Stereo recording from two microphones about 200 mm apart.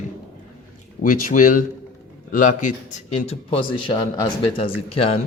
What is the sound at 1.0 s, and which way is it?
A man's voice, 45° left (ahead or behind).